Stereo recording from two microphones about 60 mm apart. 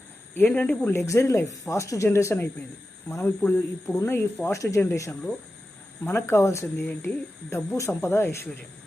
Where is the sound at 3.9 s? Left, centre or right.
Left.